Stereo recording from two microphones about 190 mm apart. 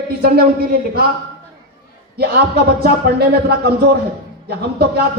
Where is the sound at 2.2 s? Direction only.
55° right (ahead or behind).